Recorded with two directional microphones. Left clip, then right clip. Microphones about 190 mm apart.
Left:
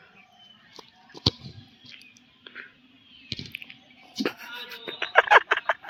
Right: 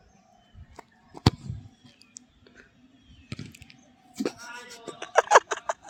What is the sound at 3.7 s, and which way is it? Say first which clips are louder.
Squish: left 7 dB; 20° right (ahead or behind).